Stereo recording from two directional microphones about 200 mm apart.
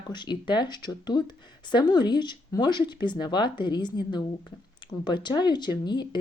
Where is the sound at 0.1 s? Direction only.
20° left (ahead or behind).